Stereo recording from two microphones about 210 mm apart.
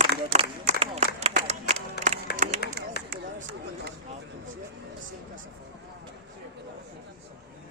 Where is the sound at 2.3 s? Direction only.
50° left (ahead or behind).